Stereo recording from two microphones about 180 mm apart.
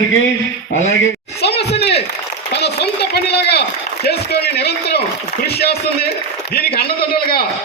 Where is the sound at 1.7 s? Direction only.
65° left (ahead or behind).